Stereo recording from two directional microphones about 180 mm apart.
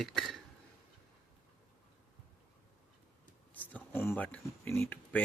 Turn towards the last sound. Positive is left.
turn(degrees=10)  # may be behind; listen again after turning